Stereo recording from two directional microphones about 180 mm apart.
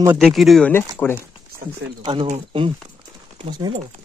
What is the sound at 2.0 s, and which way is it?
Speech, 25° right (ahead or behind).